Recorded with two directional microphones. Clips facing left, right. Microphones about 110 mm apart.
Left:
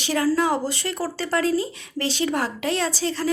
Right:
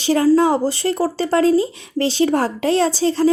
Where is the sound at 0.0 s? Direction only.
30° right (ahead or behind).